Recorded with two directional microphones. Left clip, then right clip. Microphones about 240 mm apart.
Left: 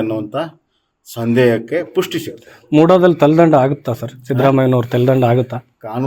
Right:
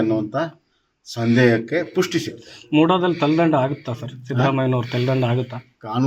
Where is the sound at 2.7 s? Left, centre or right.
Left.